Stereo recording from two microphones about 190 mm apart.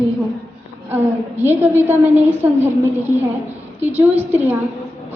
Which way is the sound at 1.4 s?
10° right (ahead or behind).